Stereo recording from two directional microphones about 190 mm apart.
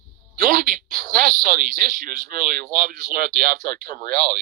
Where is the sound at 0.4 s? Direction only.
50° right (ahead or behind).